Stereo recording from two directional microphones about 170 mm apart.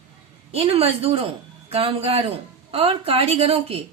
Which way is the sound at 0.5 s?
35° right (ahead or behind).